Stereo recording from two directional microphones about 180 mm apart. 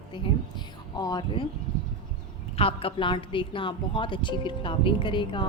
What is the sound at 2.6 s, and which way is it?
A woman's voice, 30° left (ahead or behind).